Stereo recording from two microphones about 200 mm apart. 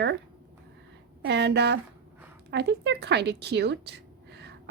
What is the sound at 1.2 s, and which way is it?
A woman's voice, 55° right (ahead or behind).